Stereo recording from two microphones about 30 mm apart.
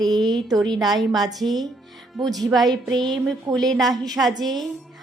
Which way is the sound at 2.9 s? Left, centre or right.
Centre.